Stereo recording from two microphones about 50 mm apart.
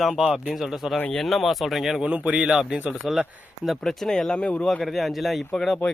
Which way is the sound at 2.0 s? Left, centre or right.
Right.